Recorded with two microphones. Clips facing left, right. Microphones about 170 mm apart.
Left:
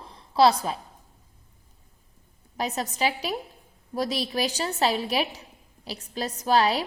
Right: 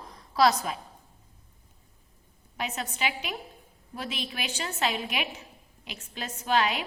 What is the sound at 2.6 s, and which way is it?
A woman's voice, 40° left (ahead or behind).